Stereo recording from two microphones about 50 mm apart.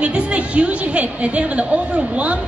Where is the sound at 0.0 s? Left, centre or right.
Right.